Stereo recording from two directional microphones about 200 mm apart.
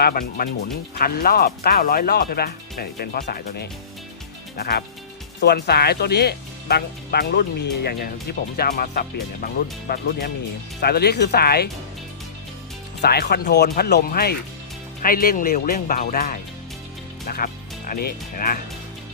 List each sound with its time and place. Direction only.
0.0 s speech: 45° left (ahead or behind)
13.0 s speech: 55° left (ahead or behind)